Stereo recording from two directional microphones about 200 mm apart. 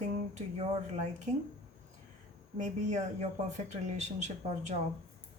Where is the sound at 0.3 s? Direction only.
30° right (ahead or behind).